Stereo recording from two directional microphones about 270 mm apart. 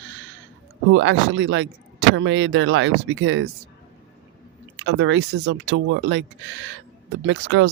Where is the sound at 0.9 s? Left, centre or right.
Right.